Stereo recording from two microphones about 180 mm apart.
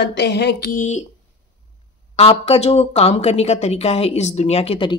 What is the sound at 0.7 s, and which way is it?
Speech, 45° left (ahead or behind).